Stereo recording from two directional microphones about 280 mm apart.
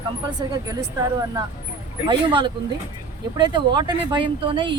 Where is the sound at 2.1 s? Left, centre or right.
Centre.